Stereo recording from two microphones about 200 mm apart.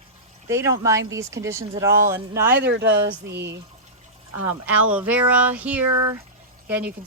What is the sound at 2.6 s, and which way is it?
Speech, 60° right (ahead or behind).